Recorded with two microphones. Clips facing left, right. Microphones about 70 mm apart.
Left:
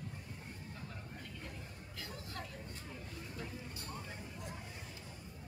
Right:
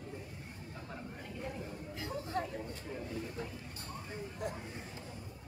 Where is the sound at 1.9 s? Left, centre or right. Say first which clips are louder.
Right 10 dB; right.